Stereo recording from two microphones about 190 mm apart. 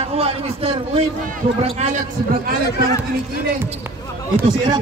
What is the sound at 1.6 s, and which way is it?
Speech, 30° right (ahead or behind).